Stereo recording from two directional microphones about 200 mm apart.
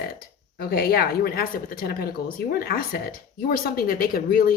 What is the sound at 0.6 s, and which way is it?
Speech, 50° left (ahead or behind).